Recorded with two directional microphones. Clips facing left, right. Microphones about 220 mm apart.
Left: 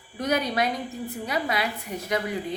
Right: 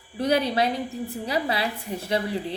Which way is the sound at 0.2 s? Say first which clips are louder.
Right 3 dB; 30° right (ahead or behind).